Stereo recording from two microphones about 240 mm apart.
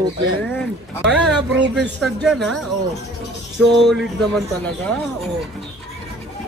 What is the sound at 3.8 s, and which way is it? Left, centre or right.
Speech, centre.